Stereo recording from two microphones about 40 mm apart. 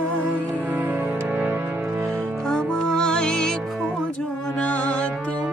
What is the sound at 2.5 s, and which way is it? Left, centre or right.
Music, left.